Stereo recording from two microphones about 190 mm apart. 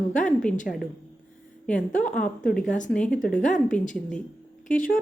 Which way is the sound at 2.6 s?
40° left (ahead or behind).